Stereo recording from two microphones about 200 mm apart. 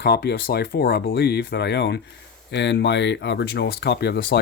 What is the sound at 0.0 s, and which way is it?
Speech, 55° left (ahead or behind).